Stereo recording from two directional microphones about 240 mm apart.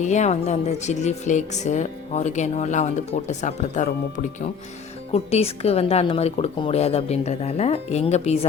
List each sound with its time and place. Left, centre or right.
0.0 s speech: left